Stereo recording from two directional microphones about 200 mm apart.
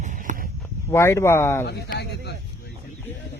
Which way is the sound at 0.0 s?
40° right (ahead or behind).